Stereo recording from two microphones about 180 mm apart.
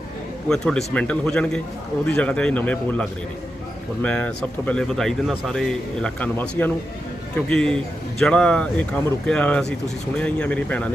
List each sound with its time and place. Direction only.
0.4 s speech: 5° left (ahead or behind)